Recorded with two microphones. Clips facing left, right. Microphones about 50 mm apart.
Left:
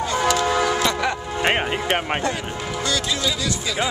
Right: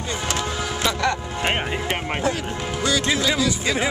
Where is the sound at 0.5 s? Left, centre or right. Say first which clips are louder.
Left 7 dB; left.